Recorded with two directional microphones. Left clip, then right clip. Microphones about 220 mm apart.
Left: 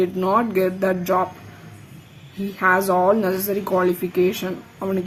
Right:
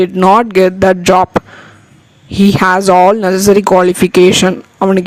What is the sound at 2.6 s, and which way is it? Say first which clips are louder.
A man's voice: right 9 dB; 45° right (ahead or behind).